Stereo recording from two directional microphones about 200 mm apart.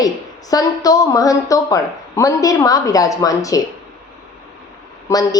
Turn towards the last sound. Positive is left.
turn(degrees=15)  # may be behind; listen again after turning